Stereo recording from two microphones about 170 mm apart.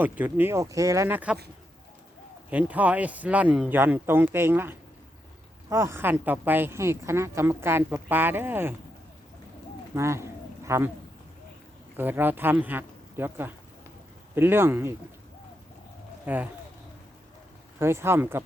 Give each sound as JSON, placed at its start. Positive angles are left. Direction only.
{"t": 0.0, "sound": "speech", "side_deg": -10}
{"t": 2.5, "sound": "speech", "side_deg": -10}
{"t": 9.9, "sound": "a sound", "side_deg": -15}
{"t": 11.9, "sound": "speech", "side_deg": -10}
{"t": 16.2, "sound": "speech", "side_deg": -10}
{"t": 17.7, "sound": "speech", "side_deg": -15}